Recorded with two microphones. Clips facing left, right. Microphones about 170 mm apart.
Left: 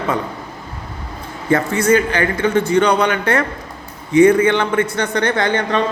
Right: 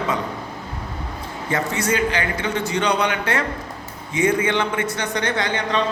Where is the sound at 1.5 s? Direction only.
55° left (ahead or behind).